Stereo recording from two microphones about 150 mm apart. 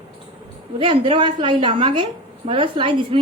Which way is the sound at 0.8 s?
35° right (ahead or behind).